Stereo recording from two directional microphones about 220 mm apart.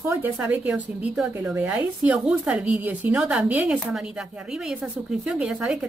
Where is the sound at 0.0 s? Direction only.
10° right (ahead or behind).